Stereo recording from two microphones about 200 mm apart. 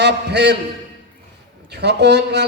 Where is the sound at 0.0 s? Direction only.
55° right (ahead or behind).